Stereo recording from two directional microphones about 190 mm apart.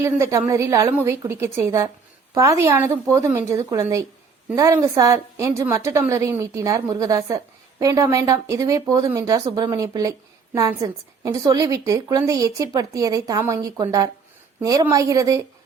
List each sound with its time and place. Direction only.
0.0 s speech: 15° right (ahead or behind)